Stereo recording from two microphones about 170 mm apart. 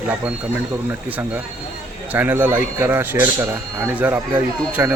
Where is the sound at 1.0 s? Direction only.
10° right (ahead or behind).